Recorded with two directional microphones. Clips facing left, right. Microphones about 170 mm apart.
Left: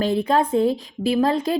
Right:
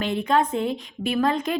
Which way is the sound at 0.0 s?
35° left (ahead or behind).